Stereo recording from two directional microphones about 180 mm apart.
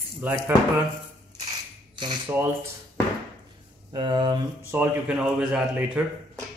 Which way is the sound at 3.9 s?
25° right (ahead or behind).